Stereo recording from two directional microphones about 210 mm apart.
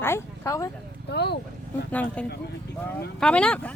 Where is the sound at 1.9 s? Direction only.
5° left (ahead or behind).